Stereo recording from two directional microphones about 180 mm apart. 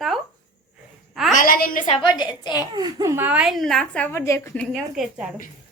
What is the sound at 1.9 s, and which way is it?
Speech, 25° left (ahead or behind).